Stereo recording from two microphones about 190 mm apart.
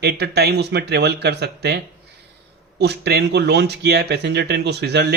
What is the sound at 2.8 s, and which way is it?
Speech, 60° right (ahead or behind).